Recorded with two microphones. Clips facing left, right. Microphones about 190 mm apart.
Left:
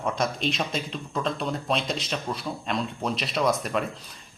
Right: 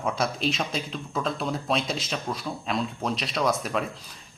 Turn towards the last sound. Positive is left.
turn(degrees=0)  # may be behind; listen again after turning